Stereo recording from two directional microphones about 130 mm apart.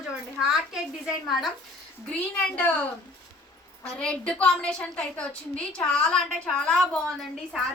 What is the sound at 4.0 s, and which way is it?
A woman's voice, 10° left (ahead or behind).